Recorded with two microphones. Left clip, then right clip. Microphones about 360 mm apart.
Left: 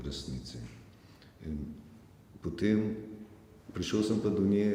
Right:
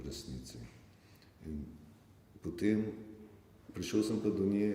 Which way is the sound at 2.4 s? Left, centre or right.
Left.